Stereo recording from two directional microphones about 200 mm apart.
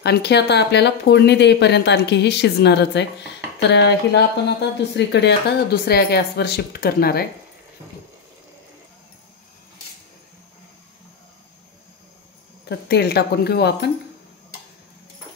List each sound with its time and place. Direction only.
0.0 s speech: 55° left (ahead or behind)
12.6 s speech: 55° left (ahead or behind)